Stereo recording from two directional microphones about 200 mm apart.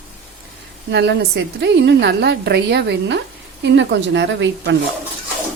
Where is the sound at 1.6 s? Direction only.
60° right (ahead or behind).